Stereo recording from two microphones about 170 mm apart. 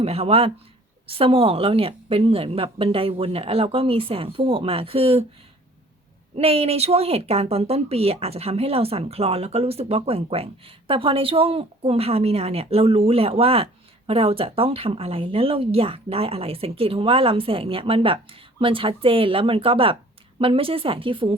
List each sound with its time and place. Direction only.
0.0 s speech: 35° right (ahead or behind)
6.3 s speech: 35° right (ahead or behind)